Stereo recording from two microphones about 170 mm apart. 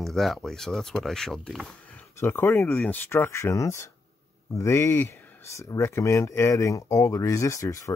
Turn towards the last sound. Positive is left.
turn(degrees=20)  # may be behind; listen again after turning